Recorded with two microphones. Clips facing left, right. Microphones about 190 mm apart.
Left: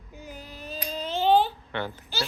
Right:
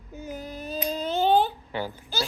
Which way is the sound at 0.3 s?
45° right (ahead or behind).